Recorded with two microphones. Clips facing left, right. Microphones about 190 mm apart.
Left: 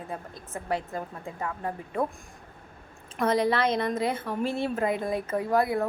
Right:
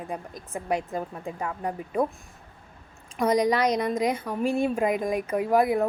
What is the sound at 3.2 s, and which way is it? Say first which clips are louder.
Speech: right 2 dB; 15° right (ahead or behind).